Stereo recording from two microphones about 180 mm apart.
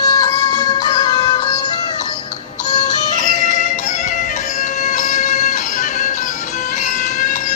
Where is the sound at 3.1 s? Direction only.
45° left (ahead or behind).